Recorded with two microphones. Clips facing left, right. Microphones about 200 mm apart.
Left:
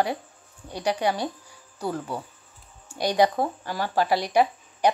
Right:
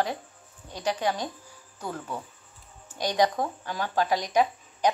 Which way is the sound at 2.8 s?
10° left (ahead or behind).